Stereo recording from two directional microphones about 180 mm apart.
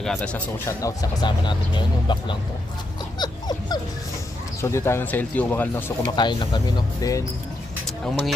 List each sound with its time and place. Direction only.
0.0 s speech: 5° left (ahead or behind)
0.8 s speech: 20° left (ahead or behind)
3.2 s dog: 20° left (ahead or behind)
4.6 s speech: 15° left (ahead or behind)
6.1 s speech: 25° left (ahead or behind)
7.9 s speech: centre (ahead or behind)